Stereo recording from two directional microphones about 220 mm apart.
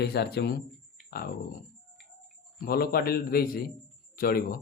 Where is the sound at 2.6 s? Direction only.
45° left (ahead or behind).